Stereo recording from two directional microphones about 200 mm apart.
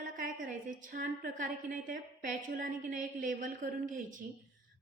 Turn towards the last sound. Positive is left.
turn(degrees=-40)  # may be behind; listen again after turning